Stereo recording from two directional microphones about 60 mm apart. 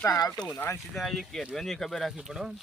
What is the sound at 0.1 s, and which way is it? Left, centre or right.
Speech, left.